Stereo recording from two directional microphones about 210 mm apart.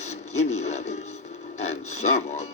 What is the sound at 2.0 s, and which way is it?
Speech, 30° left (ahead or behind).